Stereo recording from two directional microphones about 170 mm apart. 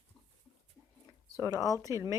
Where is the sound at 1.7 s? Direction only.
20° right (ahead or behind).